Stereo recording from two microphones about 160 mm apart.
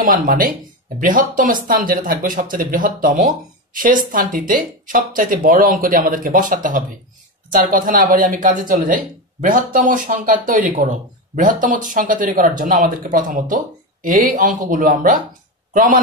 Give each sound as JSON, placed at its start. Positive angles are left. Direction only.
{"t": 0.0, "sound": "a man's voice", "side_deg": -60}